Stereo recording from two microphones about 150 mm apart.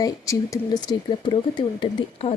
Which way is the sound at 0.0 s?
25° left (ahead or behind).